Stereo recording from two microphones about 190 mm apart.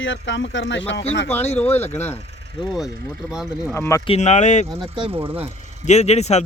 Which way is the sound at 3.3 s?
5° right (ahead or behind).